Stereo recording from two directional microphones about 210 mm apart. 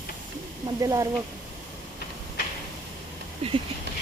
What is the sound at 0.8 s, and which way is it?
Speech, 15° right (ahead or behind).